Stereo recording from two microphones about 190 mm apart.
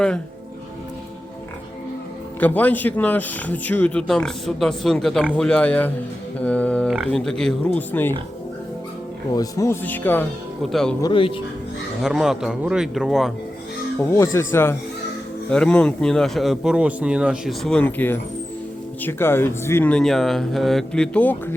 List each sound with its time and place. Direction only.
2.4 s speech: 10° left (ahead or behind)
9.3 s speech: 20° left (ahead or behind); by 10.9 s centre (ahead or behind)
11.0 s speech: 25° left (ahead or behind)
12.0 s speech: 5° right (ahead or behind)
14.1 s speech: 15° left (ahead or behind)